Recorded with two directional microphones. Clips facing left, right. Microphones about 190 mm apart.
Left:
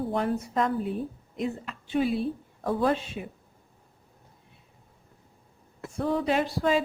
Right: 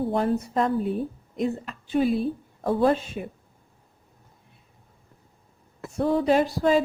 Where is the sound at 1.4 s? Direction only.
40° right (ahead or behind).